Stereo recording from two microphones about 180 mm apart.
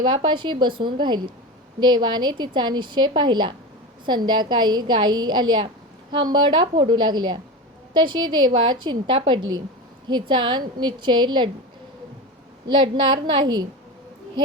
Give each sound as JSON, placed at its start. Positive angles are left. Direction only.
{"t": 0.0, "sound": "a woman's voice", "side_deg": -25}
{"t": 12.6, "sound": "a woman's voice", "side_deg": -25}